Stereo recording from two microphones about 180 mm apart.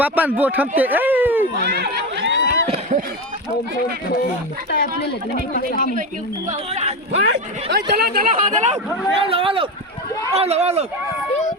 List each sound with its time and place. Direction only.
0.0 s speech: 10° right (ahead or behind)
0.8 s a sound: 10° right (ahead or behind)
1.5 s run: 65° right (ahead or behind); by 2.6 s 85° right
2.6 s run: 35° right (ahead or behind)
5.5 s speech: 55° left (ahead or behind)
6.5 s speech: 40° right (ahead or behind)
7.7 s speech: 65° right (ahead or behind); by 10.8 s 35° right (ahead or behind)